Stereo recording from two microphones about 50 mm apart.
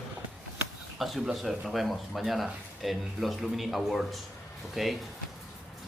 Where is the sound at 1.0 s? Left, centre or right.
Centre.